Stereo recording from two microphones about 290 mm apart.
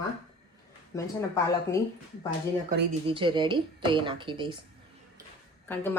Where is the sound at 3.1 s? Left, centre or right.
Centre.